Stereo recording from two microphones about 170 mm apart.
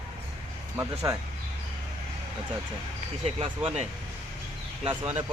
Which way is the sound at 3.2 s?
35° right (ahead or behind).